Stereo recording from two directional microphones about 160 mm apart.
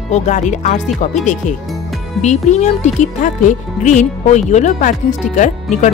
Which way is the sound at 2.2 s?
45° left (ahead or behind).